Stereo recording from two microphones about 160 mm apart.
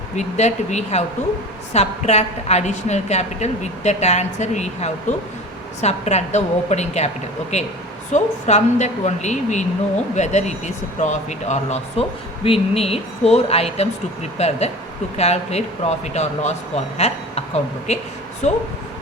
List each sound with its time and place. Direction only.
0.2 s a woman's voice: 45° left (ahead or behind)